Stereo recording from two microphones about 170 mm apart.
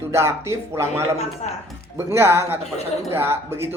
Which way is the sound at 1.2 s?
40° left (ahead or behind).